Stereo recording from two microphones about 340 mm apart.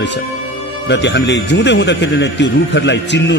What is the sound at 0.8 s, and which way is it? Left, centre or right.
Speech, left.